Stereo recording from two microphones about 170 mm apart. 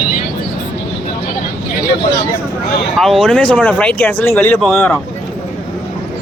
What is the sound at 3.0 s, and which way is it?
Speech, centre (ahead or behind).